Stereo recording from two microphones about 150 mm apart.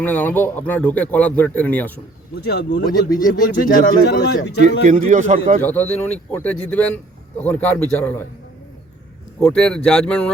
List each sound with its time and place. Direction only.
0.0 s a man's voice: 10° left (ahead or behind)
2.3 s speech: 90° left
3.2 s speech: 70° left (ahead or behind); by 4.6 s 90° left
4.6 s a man's voice: 55° right (ahead or behind)
5.6 s a man's voice: 10° left (ahead or behind)
9.4 s speech: 5° left (ahead or behind)